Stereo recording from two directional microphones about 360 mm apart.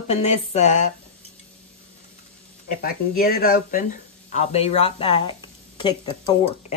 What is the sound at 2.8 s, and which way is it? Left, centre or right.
Speech, left.